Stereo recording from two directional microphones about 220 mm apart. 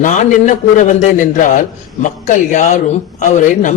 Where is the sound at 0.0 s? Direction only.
35° left (ahead or behind).